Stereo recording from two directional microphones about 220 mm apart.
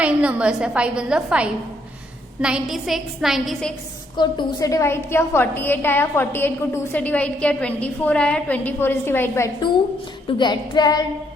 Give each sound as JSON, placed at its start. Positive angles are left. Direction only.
{"t": 0.0, "sound": "a woman's voice", "side_deg": -5}
{"t": 4.2, "sound": "a woman's voice", "side_deg": 20}
{"t": 10.2, "sound": "child singing", "side_deg": 20}